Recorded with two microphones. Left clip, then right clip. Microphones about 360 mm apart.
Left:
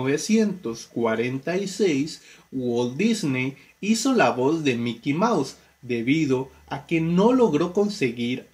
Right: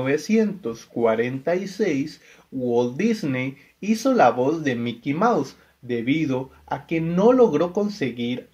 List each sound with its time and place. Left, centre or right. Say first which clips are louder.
0.0 s speech: right 1 dB; centre